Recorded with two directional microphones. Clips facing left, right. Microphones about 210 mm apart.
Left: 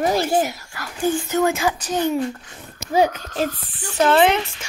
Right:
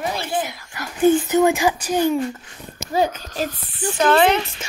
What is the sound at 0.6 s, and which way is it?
Speech, 20° right (ahead or behind).